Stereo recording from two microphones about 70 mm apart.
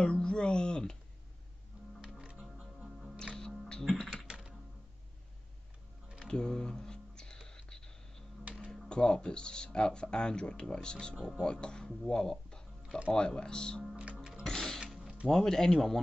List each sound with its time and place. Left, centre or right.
0.0 s speech: centre
2.0 s music: centre
3.8 s typing: centre
4.3 s typing: centre
6.2 s whispering: centre
8.5 s music: centre
8.8 s speech: centre
13.9 s music: centre
14.4 s music: centre
14.8 s music: centre
15.2 s speech: centre